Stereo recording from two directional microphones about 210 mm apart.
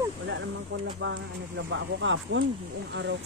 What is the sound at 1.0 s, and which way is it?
Speech, 60° right (ahead or behind).